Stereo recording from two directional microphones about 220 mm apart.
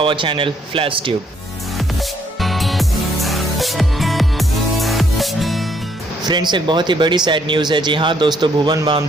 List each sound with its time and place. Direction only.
0.0 s speech: 25° right (ahead or behind)
2.4 s music: centre (ahead or behind)
6.2 s speech: 20° right (ahead or behind)